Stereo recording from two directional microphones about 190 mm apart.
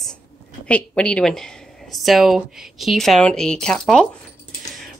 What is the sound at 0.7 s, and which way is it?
A woman's voice, 5° left (ahead or behind).